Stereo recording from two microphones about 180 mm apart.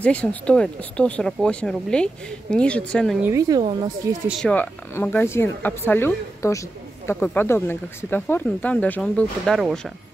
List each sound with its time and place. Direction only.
0.0 s speech: 5° left (ahead or behind)
3.2 s a woman's voice: 15° right (ahead or behind)
4.3 s speech: 5° left (ahead or behind)